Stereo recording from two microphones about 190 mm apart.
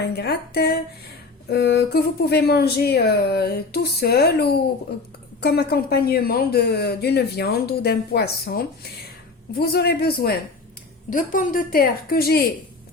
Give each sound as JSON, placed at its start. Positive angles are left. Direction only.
{"t": 0.0, "sound": "speech", "side_deg": 60}
{"t": 11.1, "sound": "a woman's voice", "side_deg": 45}